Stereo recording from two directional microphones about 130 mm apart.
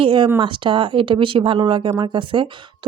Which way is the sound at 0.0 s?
40° right (ahead or behind).